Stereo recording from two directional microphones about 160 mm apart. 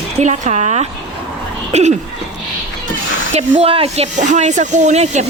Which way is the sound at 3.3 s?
40° right (ahead or behind).